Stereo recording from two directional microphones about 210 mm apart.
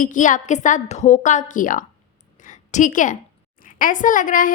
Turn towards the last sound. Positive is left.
turn(degrees=40)  # may be behind; listen again after turning